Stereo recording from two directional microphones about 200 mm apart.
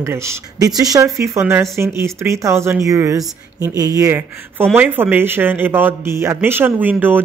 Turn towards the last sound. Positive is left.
turn(degrees=-10)  # may be behind; listen again after turning